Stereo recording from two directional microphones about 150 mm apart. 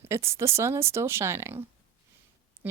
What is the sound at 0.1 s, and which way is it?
Speech, 20° right (ahead or behind).